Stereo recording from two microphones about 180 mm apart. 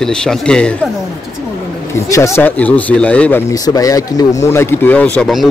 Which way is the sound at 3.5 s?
20° left (ahead or behind).